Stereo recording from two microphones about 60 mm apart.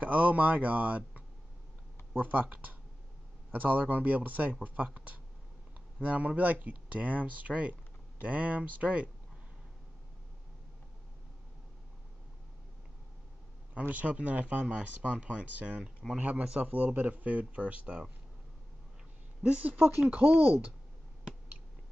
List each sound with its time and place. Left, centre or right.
0.0 s speech: right
6.0 s speech: right
13.7 s speech: right
19.4 s speech: right
20.2 s speech: right